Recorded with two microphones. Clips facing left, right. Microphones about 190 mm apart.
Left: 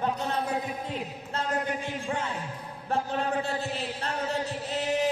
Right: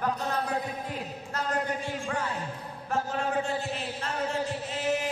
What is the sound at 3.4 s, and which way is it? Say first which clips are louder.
Speech: even; 35° left (ahead or behind).